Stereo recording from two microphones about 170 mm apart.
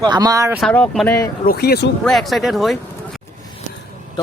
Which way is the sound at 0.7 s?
10° left (ahead or behind).